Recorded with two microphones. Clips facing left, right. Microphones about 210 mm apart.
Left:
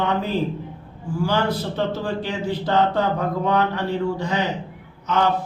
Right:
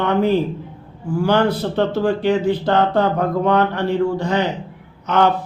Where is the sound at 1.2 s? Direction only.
60° right (ahead or behind).